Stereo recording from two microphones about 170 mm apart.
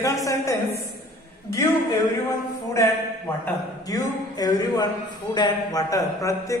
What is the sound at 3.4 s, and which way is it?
A man's voice, 20° left (ahead or behind).